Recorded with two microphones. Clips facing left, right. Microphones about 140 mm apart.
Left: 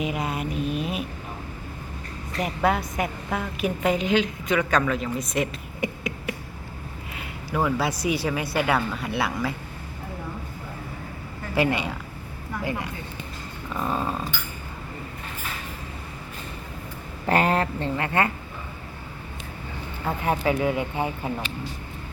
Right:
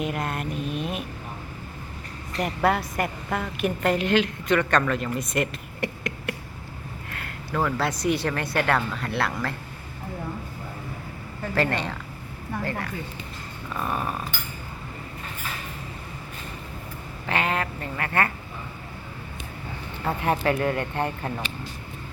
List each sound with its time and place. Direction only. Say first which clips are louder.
0.0 s a sound: left 1 dB; centre (ahead or behind)
2.4 s a woman's voice: even; centre (ahead or behind)
11.5 s speech: left 2 dB; 10° left (ahead or behind)
13.7 s a sound: left 2 dB; 20° left (ahead or behind)
17.2 s speech: left 5 dB; 40° left (ahead or behind); by 18.3 s 20° left (ahead or behind)
20.1 s a woman's voice: even; centre (ahead or behind)